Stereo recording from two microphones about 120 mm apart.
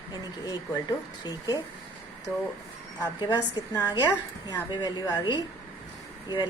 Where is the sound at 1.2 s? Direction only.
30° left (ahead or behind).